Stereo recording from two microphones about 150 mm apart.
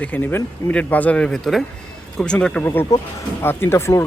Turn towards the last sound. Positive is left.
turn(degrees=15)  # may be behind; listen again after turning